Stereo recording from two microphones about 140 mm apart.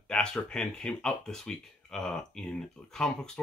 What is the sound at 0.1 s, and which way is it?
Speech, 5° left (ahead or behind).